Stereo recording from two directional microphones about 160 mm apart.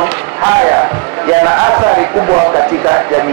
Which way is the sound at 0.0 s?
15° right (ahead or behind).